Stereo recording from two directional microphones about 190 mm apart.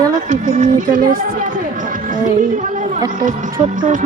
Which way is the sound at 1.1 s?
45° right (ahead or behind).